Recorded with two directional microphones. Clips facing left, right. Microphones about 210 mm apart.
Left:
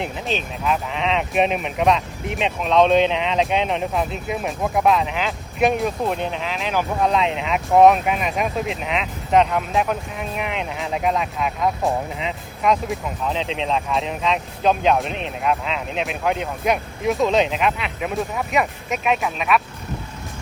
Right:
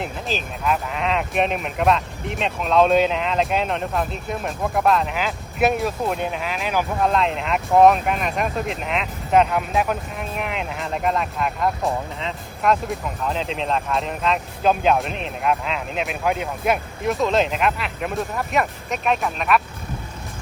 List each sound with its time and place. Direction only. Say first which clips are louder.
0.0 s speech: left 2 dB; centre (ahead or behind)